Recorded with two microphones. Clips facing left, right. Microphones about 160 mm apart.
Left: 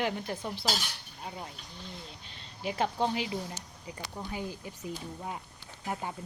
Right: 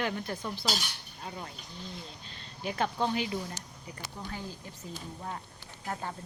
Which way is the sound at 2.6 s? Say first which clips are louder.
Left 1 dB; 25° left (ahead or behind).